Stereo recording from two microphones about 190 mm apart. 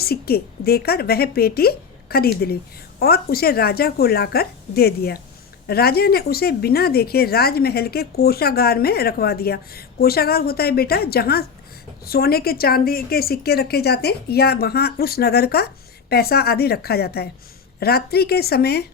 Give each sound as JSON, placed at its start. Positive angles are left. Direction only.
{"t": 0.0, "sound": "speech", "side_deg": 55}